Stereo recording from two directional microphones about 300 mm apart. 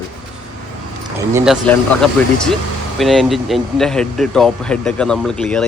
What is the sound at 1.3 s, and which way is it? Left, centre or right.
Speech, centre.